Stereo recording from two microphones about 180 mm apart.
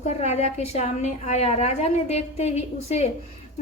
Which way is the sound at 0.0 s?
35° left (ahead or behind).